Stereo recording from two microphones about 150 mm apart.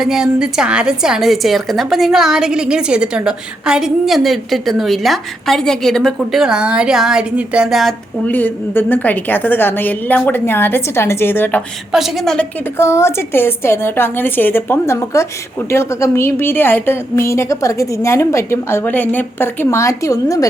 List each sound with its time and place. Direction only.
0.0 s a woman's voice: 5° right (ahead or behind)
8.3 s a woman's voice: 15° left (ahead or behind)
11.9 s a woman's voice: centre (ahead or behind)
12.7 s a woman's voice: 15° left (ahead or behind)